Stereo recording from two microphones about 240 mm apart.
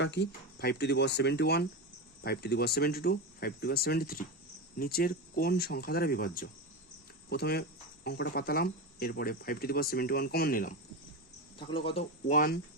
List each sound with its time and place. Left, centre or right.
0.0 s speech: left
11.7 s speech: left